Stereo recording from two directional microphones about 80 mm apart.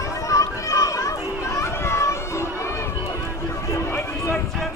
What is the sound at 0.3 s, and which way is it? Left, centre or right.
Children playing, left.